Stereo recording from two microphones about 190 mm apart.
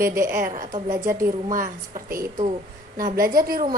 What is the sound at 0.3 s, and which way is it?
A woman's voice, 45° right (ahead or behind).